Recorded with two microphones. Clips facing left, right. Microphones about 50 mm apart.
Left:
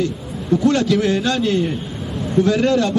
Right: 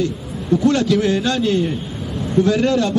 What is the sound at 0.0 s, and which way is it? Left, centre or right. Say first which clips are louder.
A man's voice: even; centre.